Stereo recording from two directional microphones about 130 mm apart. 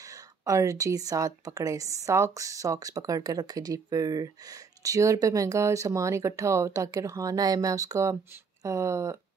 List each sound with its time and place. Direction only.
0.1 s a woman's voice: 25° right (ahead or behind)